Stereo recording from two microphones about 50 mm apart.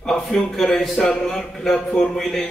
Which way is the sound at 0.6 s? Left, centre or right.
Centre.